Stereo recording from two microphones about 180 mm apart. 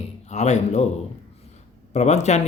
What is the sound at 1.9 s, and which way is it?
Speech, 40° left (ahead or behind).